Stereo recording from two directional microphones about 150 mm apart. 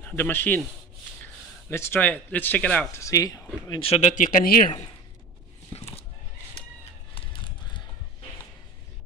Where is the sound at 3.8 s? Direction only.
40° left (ahead or behind).